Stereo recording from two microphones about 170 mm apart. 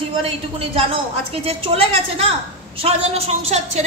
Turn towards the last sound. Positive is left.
turn(degrees=-40)  # may be behind; listen again after turning